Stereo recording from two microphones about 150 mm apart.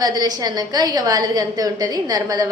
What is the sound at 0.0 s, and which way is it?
A woman's voice, 25° right (ahead or behind).